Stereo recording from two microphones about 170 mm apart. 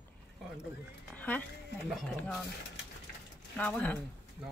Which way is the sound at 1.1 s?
10° left (ahead or behind).